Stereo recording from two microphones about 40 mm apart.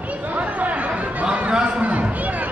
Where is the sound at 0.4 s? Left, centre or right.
Right.